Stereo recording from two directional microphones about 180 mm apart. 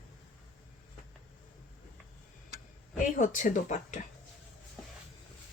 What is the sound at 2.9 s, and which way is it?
Speech, 45° left (ahead or behind).